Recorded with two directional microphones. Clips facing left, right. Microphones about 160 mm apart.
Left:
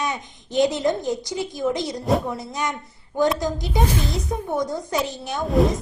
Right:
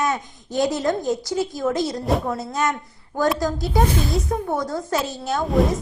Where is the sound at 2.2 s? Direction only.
55° right (ahead or behind).